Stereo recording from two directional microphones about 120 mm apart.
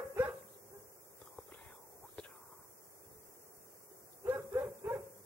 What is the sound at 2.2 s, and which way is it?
Whispering, 10° left (ahead or behind).